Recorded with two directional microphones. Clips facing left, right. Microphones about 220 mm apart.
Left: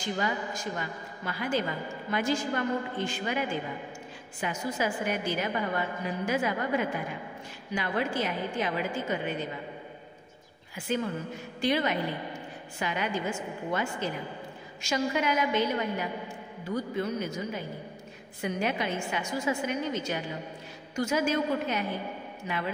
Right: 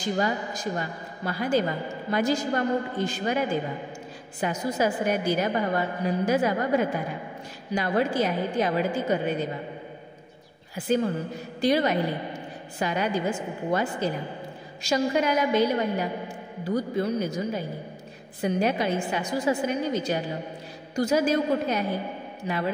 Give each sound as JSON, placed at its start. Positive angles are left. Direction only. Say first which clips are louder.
{"t": 0.0, "sound": "a woman's voice", "louder": "right 5 dB", "side_deg": -40}
{"t": 10.9, "sound": "a woman's voice", "louder": "right 6 dB", "side_deg": -35}